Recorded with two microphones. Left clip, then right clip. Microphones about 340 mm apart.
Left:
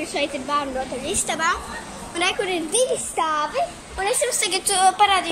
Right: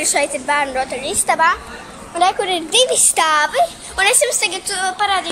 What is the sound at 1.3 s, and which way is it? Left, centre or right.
Speech, centre.